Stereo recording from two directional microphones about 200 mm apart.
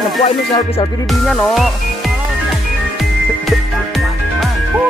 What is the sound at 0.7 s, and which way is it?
Music, 30° left (ahead or behind).